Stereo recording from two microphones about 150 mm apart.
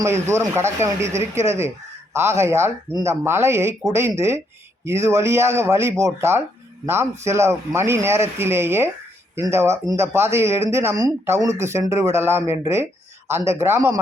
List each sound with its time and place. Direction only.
0.0 s speech: 15° right (ahead or behind)